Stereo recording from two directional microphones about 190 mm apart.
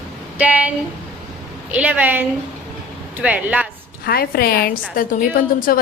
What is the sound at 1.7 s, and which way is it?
A woman's voice, 5° right (ahead or behind).